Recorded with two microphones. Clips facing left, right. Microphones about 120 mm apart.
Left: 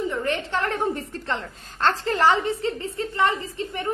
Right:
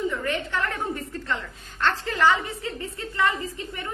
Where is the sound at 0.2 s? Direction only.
30° left (ahead or behind).